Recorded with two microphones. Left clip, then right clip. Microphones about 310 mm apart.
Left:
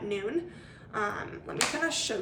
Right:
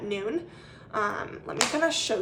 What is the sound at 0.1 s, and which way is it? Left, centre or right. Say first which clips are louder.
A woman's voice: right 2 dB; centre.